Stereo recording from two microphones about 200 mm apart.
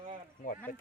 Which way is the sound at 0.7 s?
45° left (ahead or behind).